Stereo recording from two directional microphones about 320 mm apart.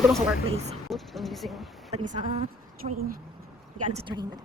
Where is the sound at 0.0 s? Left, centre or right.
Centre.